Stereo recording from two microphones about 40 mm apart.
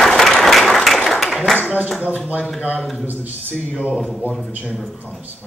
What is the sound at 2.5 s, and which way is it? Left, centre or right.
Speech, left.